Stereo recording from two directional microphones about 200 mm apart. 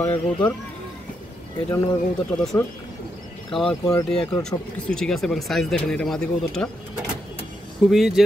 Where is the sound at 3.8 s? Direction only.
5° left (ahead or behind).